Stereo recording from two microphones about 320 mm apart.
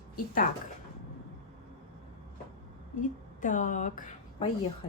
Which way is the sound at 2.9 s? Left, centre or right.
Left.